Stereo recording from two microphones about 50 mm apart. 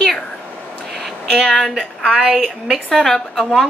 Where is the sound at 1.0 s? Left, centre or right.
Centre.